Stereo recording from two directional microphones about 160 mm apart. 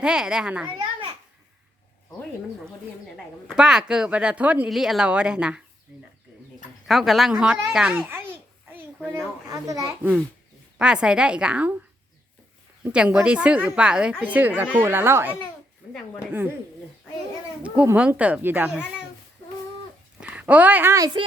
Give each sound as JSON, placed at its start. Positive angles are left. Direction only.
{"t": 0.0, "sound": "speech", "side_deg": -5}
{"t": 3.5, "sound": "speech", "side_deg": -5}
{"t": 6.8, "sound": "speech", "side_deg": 0}
{"t": 9.5, "sound": "a child's voice", "side_deg": -20}
{"t": 10.8, "sound": "speech", "side_deg": -5}
{"t": 12.8, "sound": "a woman's voice", "side_deg": -5}
{"t": 17.6, "sound": "a woman's voice", "side_deg": -10}
{"t": 20.2, "sound": "speech", "side_deg": -10}